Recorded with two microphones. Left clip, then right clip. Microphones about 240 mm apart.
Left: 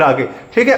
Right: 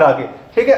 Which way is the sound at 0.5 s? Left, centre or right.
Left.